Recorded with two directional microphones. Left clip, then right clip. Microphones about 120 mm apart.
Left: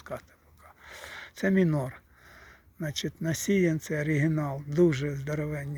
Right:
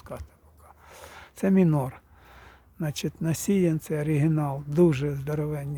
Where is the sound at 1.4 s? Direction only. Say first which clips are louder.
Right 2 dB; 25° right (ahead or behind).